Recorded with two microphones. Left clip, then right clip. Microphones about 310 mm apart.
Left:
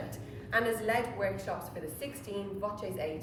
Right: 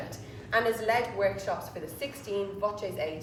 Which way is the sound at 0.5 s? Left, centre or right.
Centre.